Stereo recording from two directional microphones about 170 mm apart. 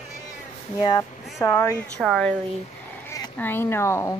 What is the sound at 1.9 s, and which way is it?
Speech, 5° left (ahead or behind).